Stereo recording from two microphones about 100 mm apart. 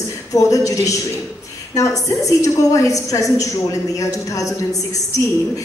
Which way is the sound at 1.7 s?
35° left (ahead or behind).